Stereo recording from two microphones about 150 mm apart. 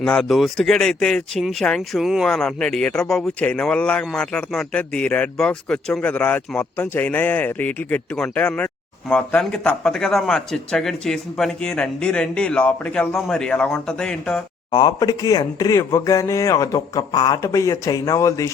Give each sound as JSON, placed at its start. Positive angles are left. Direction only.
{"t": 0.0, "sound": "speech", "side_deg": 5}
{"t": 14.7, "sound": "speech", "side_deg": 30}